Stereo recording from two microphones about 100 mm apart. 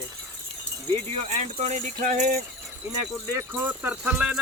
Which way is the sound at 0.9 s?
90° right.